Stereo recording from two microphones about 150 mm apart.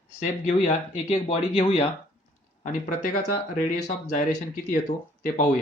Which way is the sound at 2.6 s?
50° left (ahead or behind).